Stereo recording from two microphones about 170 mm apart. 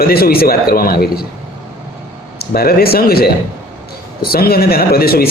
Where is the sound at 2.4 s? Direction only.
60° left (ahead or behind).